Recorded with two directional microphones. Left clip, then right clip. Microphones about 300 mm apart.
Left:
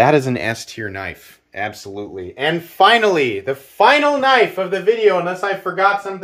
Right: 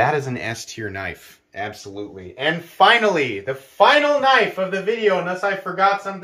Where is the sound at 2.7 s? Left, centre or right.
Left.